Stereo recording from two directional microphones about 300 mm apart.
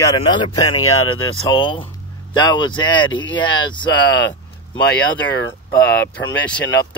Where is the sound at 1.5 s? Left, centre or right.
Centre.